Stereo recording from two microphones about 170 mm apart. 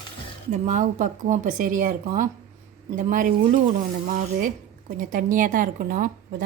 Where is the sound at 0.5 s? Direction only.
45° right (ahead or behind).